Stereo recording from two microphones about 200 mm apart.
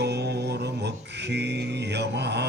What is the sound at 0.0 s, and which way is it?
Music, 55° right (ahead or behind).